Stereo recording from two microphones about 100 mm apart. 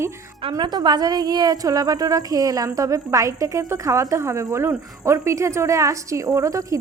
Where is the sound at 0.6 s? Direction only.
45° right (ahead or behind).